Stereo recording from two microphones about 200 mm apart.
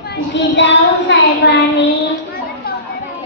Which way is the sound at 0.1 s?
60° left (ahead or behind).